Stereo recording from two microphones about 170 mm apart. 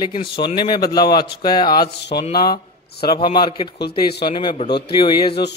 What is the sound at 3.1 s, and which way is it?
Speech, 25° left (ahead or behind).